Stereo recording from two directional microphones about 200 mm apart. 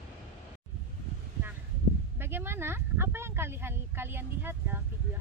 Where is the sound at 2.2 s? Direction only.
10° right (ahead or behind).